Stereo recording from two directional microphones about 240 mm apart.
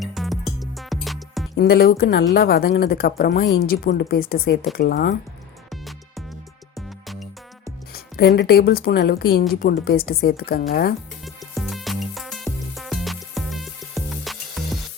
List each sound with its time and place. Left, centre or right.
0.0 s music: centre
1.5 s speech: left
5.7 s music: centre
7.9 s speech: left
11.5 s music: centre